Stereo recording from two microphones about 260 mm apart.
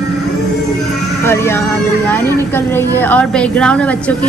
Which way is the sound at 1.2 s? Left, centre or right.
Centre.